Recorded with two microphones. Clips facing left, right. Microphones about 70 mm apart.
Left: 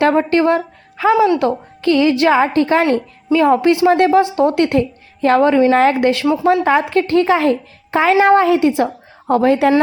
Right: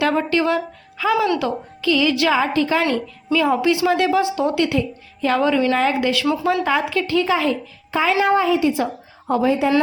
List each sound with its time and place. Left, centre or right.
0.0 s a woman's voice: left